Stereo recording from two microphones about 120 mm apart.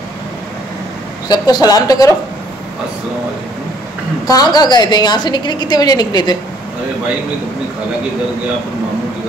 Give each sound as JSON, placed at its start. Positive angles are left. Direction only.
{"t": 1.3, "sound": "a woman's voice", "side_deg": 35}
{"t": 4.3, "sound": "a woman's voice", "side_deg": 35}